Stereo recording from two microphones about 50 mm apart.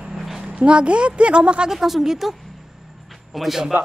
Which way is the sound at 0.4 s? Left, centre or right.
Right.